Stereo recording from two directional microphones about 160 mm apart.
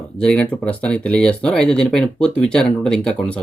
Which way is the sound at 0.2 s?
5° left (ahead or behind).